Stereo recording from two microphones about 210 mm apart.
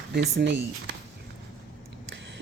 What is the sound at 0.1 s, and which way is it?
Speech, 55° right (ahead or behind).